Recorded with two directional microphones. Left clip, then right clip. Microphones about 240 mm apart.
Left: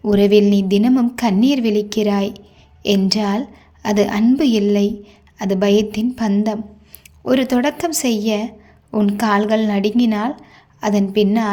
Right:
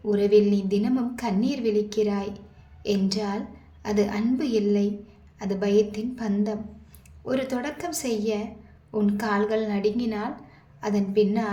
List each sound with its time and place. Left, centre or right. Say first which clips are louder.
0.0 s a woman's voice: left 7 dB; left